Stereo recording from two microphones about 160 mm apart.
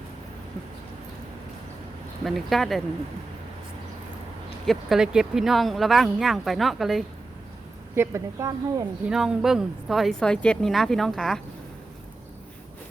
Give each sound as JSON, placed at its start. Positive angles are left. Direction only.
{"t": 2.2, "sound": "speech", "side_deg": 0}
{"t": 4.6, "sound": "speech", "side_deg": 0}
{"t": 7.9, "sound": "speech", "side_deg": -20}
{"t": 9.0, "sound": "speech", "side_deg": -5}